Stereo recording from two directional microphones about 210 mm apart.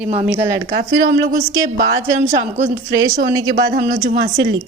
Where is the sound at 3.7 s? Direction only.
45° right (ahead or behind).